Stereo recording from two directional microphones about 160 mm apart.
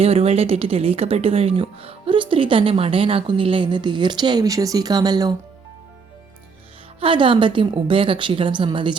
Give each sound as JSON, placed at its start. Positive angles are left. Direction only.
{"t": 0.0, "sound": "a woman's voice", "side_deg": -40}
{"t": 7.0, "sound": "a woman's voice", "side_deg": -30}